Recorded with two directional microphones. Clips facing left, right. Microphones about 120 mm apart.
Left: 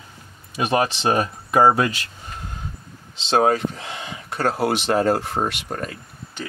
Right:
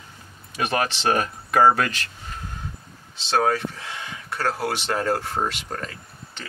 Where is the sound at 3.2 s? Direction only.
20° left (ahead or behind).